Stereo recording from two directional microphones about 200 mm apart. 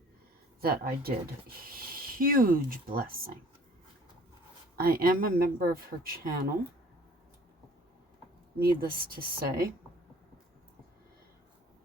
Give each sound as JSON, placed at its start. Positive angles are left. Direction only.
{"t": 0.6, "sound": "speech", "side_deg": -50}
{"t": 4.8, "sound": "speech", "side_deg": -50}
{"t": 8.5, "sound": "speech", "side_deg": -50}